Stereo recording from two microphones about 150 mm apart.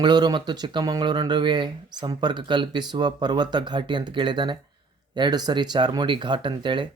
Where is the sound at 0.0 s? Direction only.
30° right (ahead or behind).